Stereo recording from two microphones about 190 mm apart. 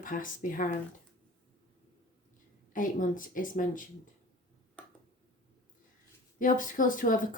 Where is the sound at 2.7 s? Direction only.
45° left (ahead or behind).